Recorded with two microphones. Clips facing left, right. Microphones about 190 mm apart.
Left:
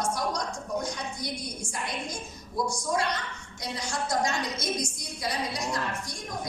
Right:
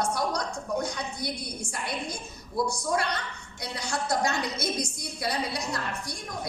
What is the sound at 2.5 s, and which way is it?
A woman's voice, 65° right (ahead or behind).